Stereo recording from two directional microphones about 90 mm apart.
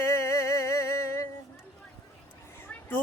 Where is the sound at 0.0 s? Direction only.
35° left (ahead or behind).